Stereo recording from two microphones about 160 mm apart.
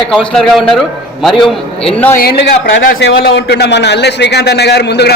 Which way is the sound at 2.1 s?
70° left (ahead or behind).